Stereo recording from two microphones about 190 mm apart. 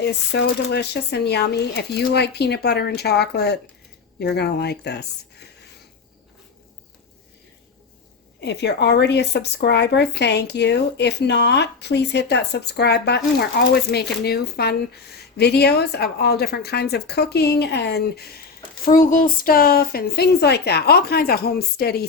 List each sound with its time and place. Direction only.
0.0 s speech: 60° left (ahead or behind)
8.4 s speech: 65° left (ahead or behind)
18.9 s speech: 45° left (ahead or behind)